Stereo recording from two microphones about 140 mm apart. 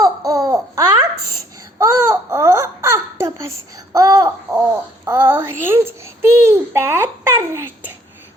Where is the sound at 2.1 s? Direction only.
20° right (ahead or behind).